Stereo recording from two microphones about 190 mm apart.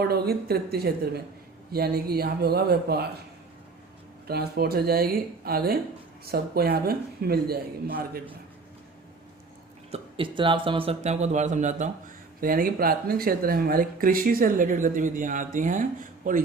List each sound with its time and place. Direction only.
0.0 s a man's voice: 55° right (ahead or behind)
4.3 s a man's voice: 55° right (ahead or behind)
9.9 s speech: 25° right (ahead or behind); by 16.4 s 45° right (ahead or behind)